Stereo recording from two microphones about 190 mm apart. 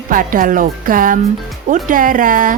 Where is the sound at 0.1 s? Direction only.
45° right (ahead or behind).